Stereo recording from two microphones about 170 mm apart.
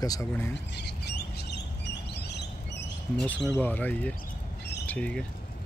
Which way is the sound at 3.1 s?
5° left (ahead or behind).